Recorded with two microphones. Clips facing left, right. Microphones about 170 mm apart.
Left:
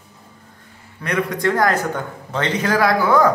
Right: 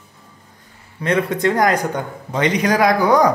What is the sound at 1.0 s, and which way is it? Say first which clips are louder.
A man's voice: right 3 dB; 25° right (ahead or behind).